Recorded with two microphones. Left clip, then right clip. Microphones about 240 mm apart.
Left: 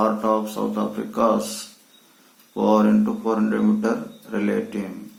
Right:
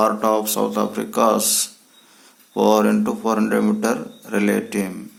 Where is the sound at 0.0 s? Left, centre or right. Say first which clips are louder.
Right 3 dB; right.